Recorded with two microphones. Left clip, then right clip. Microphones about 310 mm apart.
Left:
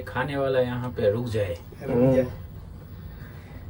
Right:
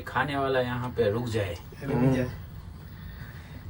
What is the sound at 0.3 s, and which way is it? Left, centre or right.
Speech, right.